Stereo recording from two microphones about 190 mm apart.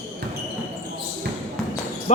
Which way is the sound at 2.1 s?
35° left (ahead or behind).